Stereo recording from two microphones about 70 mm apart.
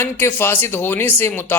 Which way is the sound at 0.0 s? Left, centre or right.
Left.